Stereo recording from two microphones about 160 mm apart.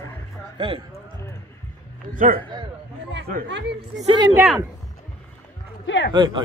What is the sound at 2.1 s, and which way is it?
Speech, 55° right (ahead or behind).